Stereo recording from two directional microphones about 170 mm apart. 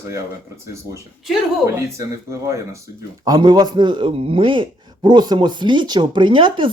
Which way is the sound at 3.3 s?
25° right (ahead or behind).